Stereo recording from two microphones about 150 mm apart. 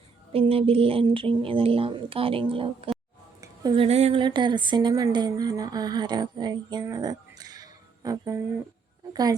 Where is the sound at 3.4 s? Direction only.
25° right (ahead or behind).